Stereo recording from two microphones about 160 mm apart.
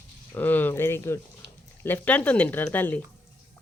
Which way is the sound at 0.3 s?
10° left (ahead or behind).